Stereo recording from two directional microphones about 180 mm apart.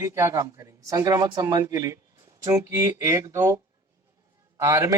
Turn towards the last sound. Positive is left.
turn(degrees=-15)  # may be behind; listen again after turning